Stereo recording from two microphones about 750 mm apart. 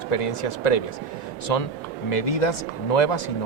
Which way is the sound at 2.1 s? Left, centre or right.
Left.